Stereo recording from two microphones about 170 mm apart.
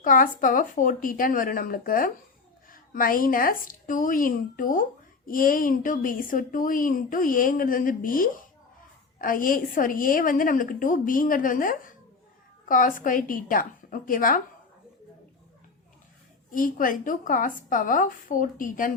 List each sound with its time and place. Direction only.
0.0 s a woman's voice: 50° left (ahead or behind)
16.5 s a woman's voice: 50° left (ahead or behind)